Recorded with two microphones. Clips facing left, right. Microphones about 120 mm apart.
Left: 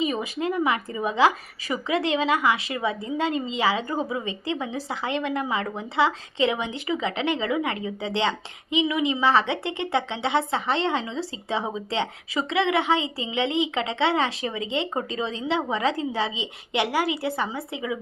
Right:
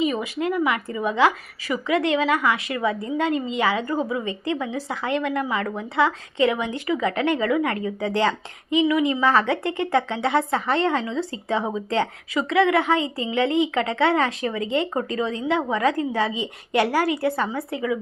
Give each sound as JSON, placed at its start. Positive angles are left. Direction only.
{"t": 0.0, "sound": "speech", "side_deg": 30}
{"t": 2.9, "sound": "a woman's voice", "side_deg": -40}
{"t": 3.2, "sound": "speech", "side_deg": 25}